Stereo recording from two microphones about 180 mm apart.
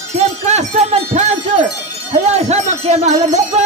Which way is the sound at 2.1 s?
35° right (ahead or behind).